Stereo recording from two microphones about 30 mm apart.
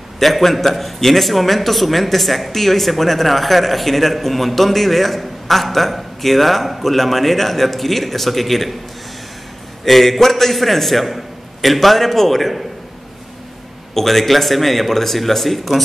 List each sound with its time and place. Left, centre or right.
0.2 s a man's voice: centre
9.8 s a man's voice: centre
13.9 s a man's voice: centre